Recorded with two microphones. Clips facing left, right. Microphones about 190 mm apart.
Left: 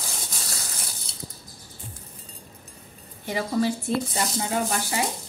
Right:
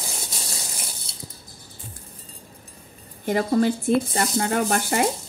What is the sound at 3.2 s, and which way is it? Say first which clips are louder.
Speech: right 5 dB; 50° right (ahead or behind).